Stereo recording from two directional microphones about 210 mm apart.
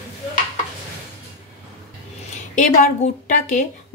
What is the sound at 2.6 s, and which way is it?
A woman's voice, 35° left (ahead or behind).